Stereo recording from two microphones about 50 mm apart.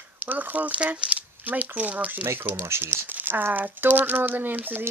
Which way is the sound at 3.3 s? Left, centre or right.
Right.